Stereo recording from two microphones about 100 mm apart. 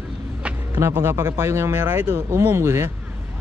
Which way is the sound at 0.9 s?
25° right (ahead or behind).